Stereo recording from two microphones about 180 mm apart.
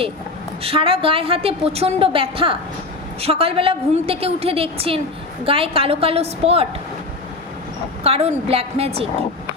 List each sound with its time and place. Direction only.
0.6 s a woman's voice: 30° right (ahead or behind)
8.0 s a woman's voice: 35° right (ahead or behind)